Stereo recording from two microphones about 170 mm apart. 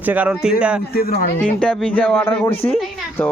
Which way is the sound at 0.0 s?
10° right (ahead or behind).